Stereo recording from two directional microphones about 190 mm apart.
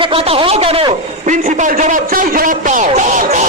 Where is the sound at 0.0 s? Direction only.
30° right (ahead or behind).